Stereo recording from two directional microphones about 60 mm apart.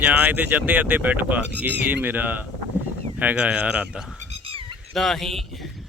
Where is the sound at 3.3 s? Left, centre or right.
Centre.